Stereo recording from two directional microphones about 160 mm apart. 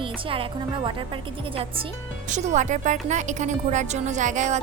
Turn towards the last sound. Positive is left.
turn(degrees=-50)  # may be behind; listen again after turning